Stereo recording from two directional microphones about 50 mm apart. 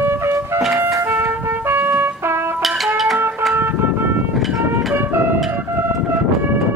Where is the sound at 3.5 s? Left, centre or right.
Right.